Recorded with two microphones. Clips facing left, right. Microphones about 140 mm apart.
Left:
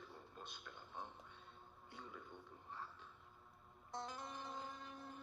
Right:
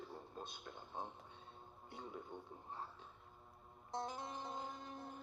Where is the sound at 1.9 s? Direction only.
25° right (ahead or behind).